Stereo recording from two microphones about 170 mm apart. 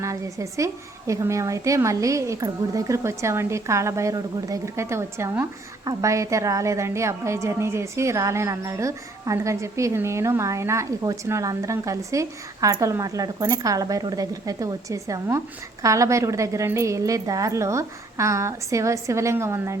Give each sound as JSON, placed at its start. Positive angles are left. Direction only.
{"t": 0.0, "sound": "a woman's voice", "side_deg": -20}